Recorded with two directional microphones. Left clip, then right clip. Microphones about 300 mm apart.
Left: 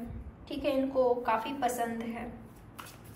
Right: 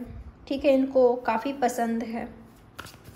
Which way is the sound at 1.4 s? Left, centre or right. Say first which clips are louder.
Right 5 dB; right.